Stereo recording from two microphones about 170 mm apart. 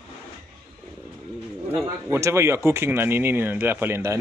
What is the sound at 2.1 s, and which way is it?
Speech, 15° right (ahead or behind).